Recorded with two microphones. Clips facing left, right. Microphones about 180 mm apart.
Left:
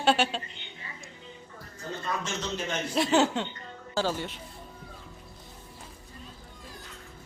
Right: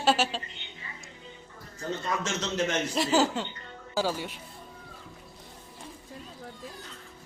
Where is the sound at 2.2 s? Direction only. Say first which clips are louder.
Right 4 dB; 90° right.